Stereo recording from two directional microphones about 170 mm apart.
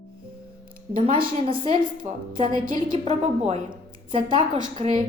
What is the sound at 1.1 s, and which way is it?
A woman's voice, 30° right (ahead or behind).